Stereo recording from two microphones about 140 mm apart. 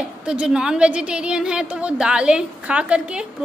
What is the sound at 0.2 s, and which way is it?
A woman's voice, 5° right (ahead or behind).